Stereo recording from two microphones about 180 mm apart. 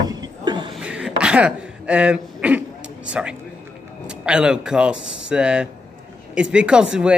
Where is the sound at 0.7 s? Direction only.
5° right (ahead or behind).